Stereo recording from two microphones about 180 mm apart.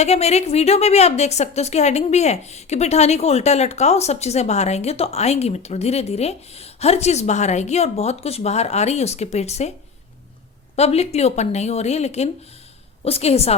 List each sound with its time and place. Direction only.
0.0 s a woman's voice: 35° left (ahead or behind)
10.8 s a woman's voice: 35° left (ahead or behind)